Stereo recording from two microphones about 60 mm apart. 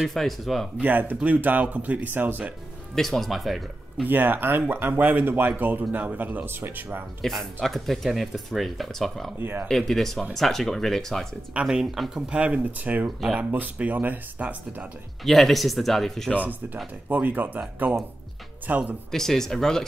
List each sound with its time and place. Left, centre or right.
0.0 s speech: centre
0.7 s speech: right
2.9 s speech: centre
4.0 s speech: right
7.2 s speech: centre
9.4 s speech: right
9.7 s speech: centre
11.6 s speech: centre; by 14.9 s right
15.2 s speech: centre
16.4 s speech: right
19.1 s speech: centre